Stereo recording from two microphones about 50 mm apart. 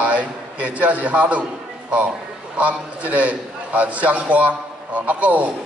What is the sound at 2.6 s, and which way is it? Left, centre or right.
A man's voice, right.